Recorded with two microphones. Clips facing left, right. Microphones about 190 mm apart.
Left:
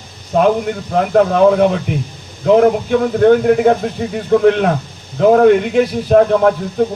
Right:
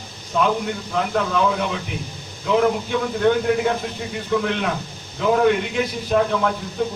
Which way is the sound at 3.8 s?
55° left (ahead or behind).